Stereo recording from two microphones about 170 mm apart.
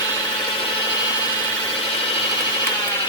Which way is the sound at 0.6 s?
25° left (ahead or behind).